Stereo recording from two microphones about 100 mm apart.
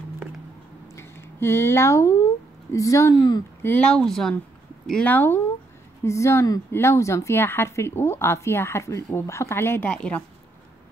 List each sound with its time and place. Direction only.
0.9 s a woman's voice: 25° left (ahead or behind)
3.6 s speech: 15° left (ahead or behind)
5.0 s a woman's voice: 20° left (ahead or behind)